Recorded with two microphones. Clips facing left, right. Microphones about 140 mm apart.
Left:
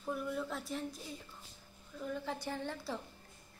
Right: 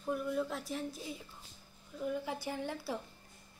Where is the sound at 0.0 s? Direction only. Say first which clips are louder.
Right 3 dB; centre (ahead or behind).